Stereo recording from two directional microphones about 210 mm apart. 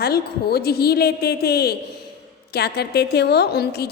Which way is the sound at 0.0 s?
50° left (ahead or behind).